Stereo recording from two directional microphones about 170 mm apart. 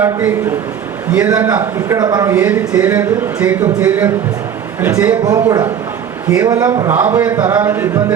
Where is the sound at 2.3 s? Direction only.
10° right (ahead or behind).